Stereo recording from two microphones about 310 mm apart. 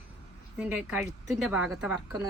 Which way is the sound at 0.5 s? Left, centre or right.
Centre.